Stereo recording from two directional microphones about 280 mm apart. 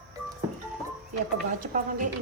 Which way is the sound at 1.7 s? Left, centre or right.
Right.